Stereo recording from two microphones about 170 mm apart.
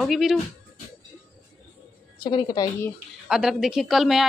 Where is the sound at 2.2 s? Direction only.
30° left (ahead or behind).